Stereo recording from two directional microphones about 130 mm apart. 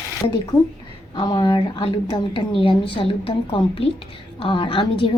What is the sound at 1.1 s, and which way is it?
A woman's voice, 35° left (ahead or behind).